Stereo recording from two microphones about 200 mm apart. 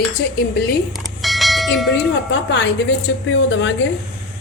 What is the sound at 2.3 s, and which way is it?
A woman's voice, 65° left (ahead or behind).